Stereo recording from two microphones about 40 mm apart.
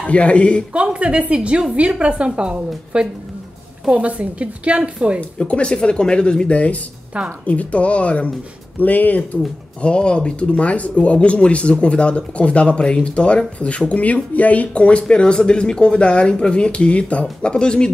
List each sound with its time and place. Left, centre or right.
0.0 s speech: left
0.7 s a woman's voice: right
5.4 s speech: left
8.7 s speech: left
9.8 s speech: left